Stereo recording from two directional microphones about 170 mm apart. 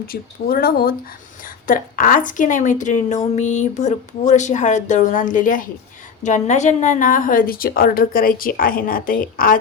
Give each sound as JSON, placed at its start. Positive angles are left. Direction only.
{"t": 0.0, "sound": "a woman's voice", "side_deg": 60}